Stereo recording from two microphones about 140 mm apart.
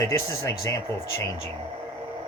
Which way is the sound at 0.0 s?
20° left (ahead or behind).